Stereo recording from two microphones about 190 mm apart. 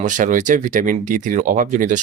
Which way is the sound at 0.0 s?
45° right (ahead or behind).